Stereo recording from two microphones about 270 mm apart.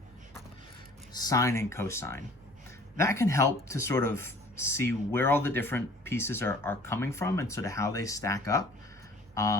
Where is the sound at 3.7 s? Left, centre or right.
Centre.